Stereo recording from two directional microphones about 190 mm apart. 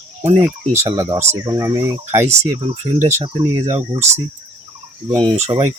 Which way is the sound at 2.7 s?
30° right (ahead or behind).